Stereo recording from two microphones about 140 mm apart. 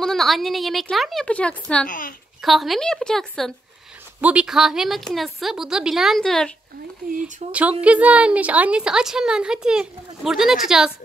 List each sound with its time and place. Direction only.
0.0 s a woman's voice: centre (ahead or behind)
1.9 s a child's voice: 80° left
2.4 s a woman's voice: centre (ahead or behind)
4.2 s a woman's voice: 10° right (ahead or behind)
7.1 s speech: 65° right (ahead or behind)
7.8 s a woman's voice: 10° right (ahead or behind)